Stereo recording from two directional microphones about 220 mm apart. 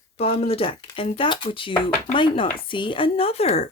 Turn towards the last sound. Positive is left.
turn(degrees=30)  # may be behind; listen again after turning